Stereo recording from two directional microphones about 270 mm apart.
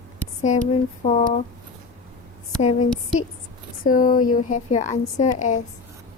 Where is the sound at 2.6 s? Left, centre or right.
Left.